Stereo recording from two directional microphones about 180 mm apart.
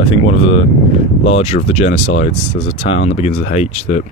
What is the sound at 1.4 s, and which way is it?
Speech, 35° left (ahead or behind).